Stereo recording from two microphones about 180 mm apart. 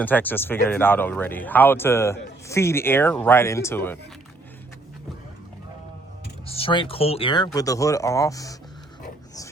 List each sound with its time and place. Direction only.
0.0 s speech: 10° left (ahead or behind)
6.5 s speech: 30° left (ahead or behind)